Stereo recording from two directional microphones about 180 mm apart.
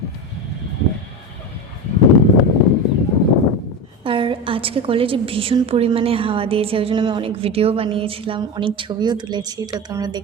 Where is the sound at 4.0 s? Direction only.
30° right (ahead or behind).